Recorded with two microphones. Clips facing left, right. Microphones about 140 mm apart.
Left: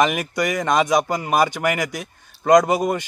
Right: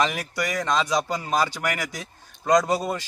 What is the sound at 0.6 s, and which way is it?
Speech, 55° left (ahead or behind).